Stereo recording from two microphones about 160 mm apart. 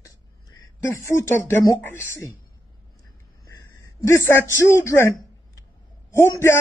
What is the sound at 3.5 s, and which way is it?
A man's voice, 20° left (ahead or behind).